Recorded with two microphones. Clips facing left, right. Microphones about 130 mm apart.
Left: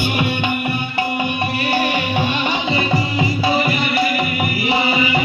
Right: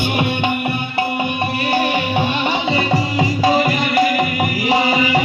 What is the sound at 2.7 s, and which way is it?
Music, 40° right (ahead or behind).